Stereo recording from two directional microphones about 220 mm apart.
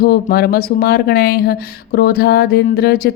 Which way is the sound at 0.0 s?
45° left (ahead or behind).